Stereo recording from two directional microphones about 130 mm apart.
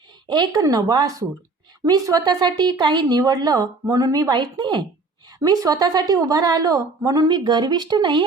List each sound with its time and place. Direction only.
0.3 s a woman's voice: 30° right (ahead or behind)